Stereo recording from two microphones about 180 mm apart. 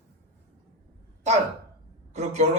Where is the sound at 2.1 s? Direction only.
40° right (ahead or behind).